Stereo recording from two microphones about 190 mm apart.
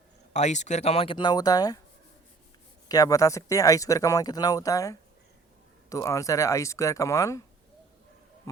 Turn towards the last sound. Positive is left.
turn(degrees=15)  # may be behind; listen again after turning